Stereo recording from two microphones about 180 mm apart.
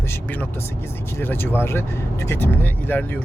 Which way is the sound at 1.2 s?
10° left (ahead or behind).